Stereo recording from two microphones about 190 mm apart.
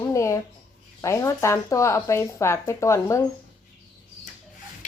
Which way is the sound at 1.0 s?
15° left (ahead or behind).